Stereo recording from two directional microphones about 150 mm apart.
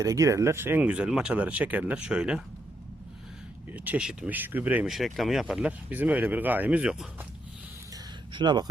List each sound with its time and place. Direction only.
0.0 s speech: 20° right (ahead or behind); by 2.4 s 5° right (ahead or behind)
3.7 s speech: 10° right (ahead or behind)
8.3 s speech: 30° right (ahead or behind)